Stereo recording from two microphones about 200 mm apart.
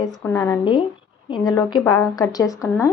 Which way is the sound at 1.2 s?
25° left (ahead or behind).